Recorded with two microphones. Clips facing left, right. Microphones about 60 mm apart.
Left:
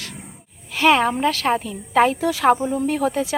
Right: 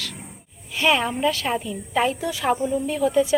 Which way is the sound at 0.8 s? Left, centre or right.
Left.